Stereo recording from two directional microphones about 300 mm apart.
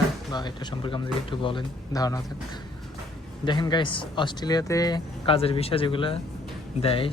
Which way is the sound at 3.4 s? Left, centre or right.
Centre.